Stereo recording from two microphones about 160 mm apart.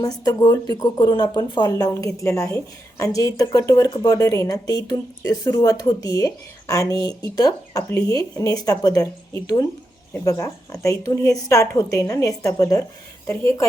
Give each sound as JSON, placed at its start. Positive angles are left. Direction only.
{"t": 0.0, "sound": "a woman's voice", "side_deg": 25}